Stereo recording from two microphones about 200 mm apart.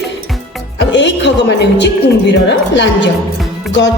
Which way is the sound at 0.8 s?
65° left (ahead or behind).